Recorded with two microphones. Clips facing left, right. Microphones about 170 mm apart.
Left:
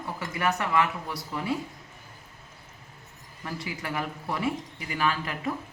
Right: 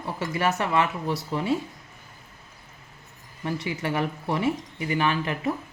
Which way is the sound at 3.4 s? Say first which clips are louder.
Right 6 dB; 25° right (ahead or behind).